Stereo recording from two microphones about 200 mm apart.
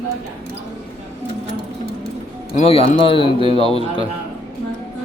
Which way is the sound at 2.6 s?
30° left (ahead or behind).